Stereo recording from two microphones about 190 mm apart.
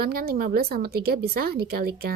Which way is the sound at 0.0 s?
55° right (ahead or behind).